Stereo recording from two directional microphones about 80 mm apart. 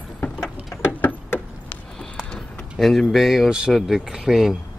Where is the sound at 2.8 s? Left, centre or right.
Centre.